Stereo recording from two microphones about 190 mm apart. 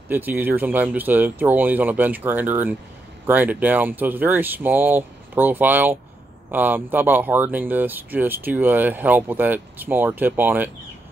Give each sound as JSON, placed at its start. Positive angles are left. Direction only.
{"t": 0.1, "sound": "speech", "side_deg": -10}